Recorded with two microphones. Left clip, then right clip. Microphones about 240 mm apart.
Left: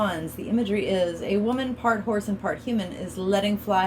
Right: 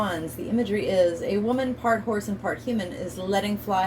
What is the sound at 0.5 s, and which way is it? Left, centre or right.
A woman's voice, left.